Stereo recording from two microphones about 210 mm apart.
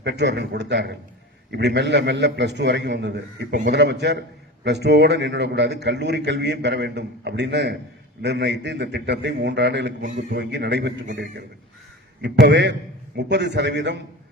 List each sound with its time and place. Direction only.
0.0 s a man's voice: 55° right (ahead or behind)